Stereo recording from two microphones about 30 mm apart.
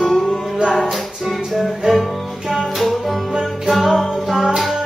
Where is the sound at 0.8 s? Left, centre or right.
Centre.